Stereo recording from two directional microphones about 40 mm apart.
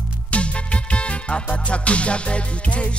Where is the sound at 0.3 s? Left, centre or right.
Left.